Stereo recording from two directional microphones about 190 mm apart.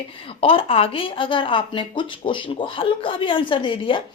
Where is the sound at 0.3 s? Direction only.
30° left (ahead or behind).